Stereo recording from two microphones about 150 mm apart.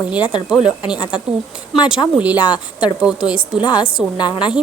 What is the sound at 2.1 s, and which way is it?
Speech, 10° right (ahead or behind).